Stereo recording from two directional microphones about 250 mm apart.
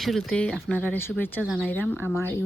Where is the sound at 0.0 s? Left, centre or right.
Centre.